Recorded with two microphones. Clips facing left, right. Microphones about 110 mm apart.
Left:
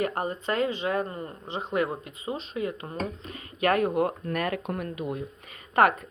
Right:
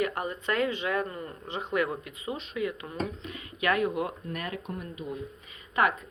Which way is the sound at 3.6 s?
45° left (ahead or behind).